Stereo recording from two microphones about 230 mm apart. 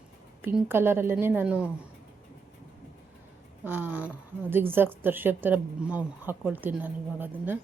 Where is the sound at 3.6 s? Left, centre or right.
Centre.